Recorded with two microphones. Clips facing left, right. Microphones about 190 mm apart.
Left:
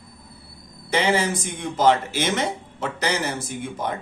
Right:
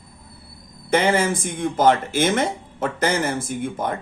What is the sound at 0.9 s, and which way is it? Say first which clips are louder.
Speech: right 3 dB; 50° right (ahead or behind).